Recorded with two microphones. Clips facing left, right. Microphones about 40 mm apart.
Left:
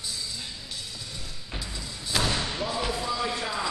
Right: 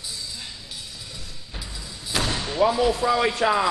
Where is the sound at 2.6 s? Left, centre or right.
Right.